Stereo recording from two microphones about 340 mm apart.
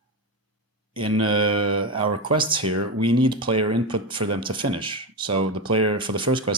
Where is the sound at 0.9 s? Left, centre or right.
Centre.